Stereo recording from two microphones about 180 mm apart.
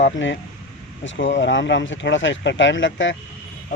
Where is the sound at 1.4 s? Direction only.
75° left (ahead or behind).